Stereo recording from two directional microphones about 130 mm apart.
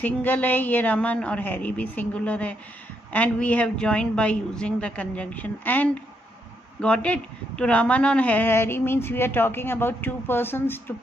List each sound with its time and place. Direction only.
0.0 s a woman's voice: 15° left (ahead or behind)